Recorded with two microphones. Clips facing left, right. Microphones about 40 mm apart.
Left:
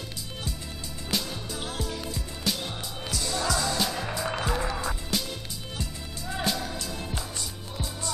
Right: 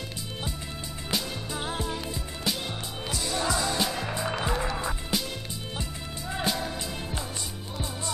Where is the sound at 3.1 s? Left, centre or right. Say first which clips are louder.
Even; right.